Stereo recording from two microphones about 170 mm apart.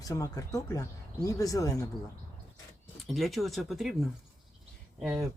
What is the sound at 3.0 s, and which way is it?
Speech, centre (ahead or behind).